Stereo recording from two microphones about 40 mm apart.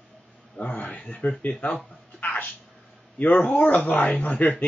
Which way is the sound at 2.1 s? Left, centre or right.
Left.